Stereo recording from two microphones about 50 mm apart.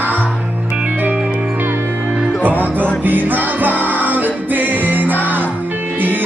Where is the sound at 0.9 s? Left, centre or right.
Right.